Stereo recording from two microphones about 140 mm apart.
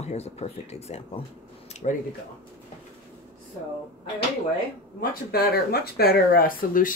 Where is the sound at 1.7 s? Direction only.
55° left (ahead or behind).